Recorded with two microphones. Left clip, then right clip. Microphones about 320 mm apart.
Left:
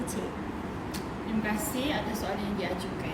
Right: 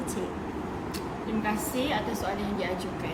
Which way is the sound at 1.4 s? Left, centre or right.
Centre.